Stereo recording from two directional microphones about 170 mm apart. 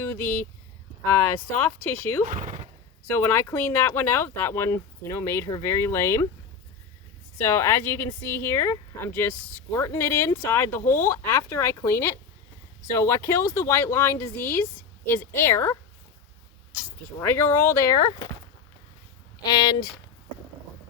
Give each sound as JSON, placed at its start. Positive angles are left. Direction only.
{"t": 0.0, "sound": "speech", "side_deg": 15}
{"t": 1.8, "sound": "speech", "side_deg": 10}
{"t": 2.3, "sound": "speech", "side_deg": -50}
{"t": 3.2, "sound": "speech", "side_deg": 15}
{"t": 7.3, "sound": "speech", "side_deg": 15}
{"t": 17.2, "sound": "speech", "side_deg": 15}
{"t": 19.4, "sound": "speech", "side_deg": 25}